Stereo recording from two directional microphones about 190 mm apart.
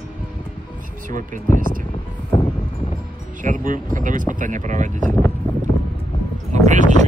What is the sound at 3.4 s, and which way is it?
Speech, 45° right (ahead or behind).